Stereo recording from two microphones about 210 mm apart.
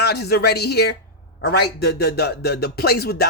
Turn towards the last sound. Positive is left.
turn(degrees=50)  # may be behind; listen again after turning